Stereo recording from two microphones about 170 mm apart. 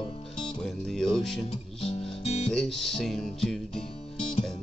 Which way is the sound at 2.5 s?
Centre (ahead or behind).